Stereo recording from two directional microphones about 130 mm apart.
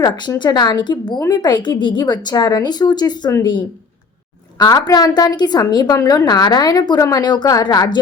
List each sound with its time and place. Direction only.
0.0 s a woman's voice: 35° left (ahead or behind)
4.5 s a woman's voice: 30° left (ahead or behind)